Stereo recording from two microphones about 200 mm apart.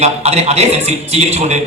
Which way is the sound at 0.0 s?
30° right (ahead or behind).